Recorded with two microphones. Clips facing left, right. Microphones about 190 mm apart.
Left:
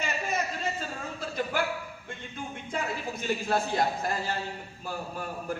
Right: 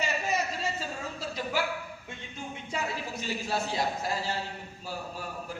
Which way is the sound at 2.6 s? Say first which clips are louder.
Left 1 dB; 55° left (ahead or behind).